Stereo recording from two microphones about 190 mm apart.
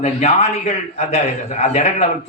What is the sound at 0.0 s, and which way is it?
A man's voice, 35° left (ahead or behind).